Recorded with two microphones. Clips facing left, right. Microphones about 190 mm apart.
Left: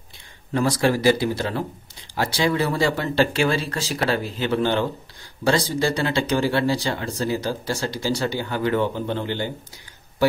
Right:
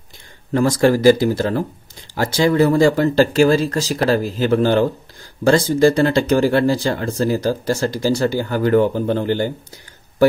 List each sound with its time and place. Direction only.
0.6 s speech: 45° right (ahead or behind)